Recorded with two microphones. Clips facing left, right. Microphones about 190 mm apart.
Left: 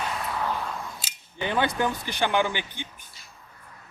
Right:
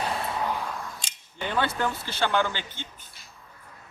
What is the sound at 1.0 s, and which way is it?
Cap gun, 5° left (ahead or behind).